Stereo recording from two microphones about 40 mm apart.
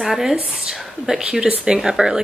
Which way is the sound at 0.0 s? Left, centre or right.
Centre.